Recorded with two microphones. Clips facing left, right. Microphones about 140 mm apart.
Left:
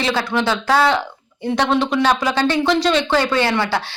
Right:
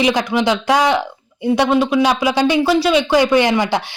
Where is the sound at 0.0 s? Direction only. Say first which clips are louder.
Right 4 dB; 15° right (ahead or behind).